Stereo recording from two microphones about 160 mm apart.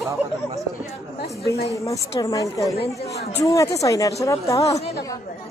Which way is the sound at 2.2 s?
20° left (ahead or behind).